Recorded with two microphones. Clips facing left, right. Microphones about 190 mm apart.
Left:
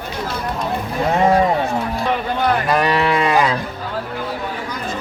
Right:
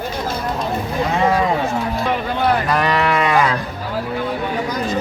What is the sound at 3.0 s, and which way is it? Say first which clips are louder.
Cattle: even; 25° left (ahead or behind).